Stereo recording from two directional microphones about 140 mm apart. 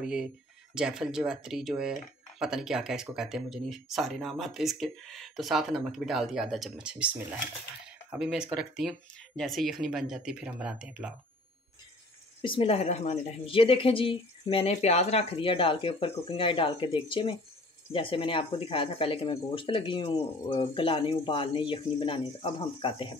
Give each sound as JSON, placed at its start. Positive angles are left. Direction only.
{"t": 0.0, "sound": "speech", "side_deg": -5}
{"t": 12.4, "sound": "speech", "side_deg": 40}